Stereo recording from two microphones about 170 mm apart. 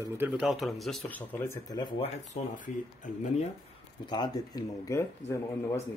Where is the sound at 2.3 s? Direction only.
45° left (ahead or behind).